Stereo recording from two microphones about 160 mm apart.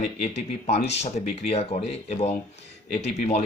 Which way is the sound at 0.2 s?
45° left (ahead or behind).